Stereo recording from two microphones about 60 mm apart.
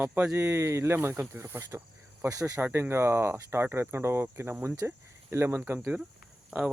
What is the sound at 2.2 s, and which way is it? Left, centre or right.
Speech, right.